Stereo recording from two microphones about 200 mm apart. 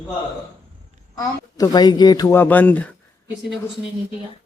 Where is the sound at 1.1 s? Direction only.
20° left (ahead or behind).